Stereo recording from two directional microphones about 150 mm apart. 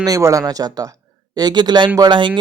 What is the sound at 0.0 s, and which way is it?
Speech, 20° right (ahead or behind).